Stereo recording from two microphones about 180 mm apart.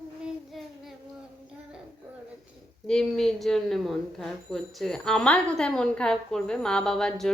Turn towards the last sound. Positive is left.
turn(degrees=5)  # may be behind; listen again after turning